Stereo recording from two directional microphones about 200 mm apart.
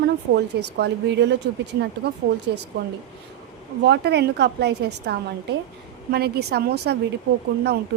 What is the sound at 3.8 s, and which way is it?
A woman's voice, 55° right (ahead or behind).